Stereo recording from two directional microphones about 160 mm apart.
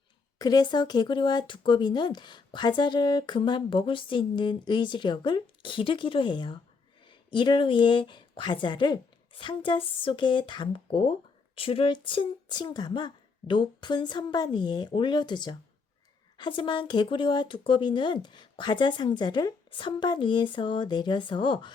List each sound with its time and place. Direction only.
0.3 s speech: 25° left (ahead or behind)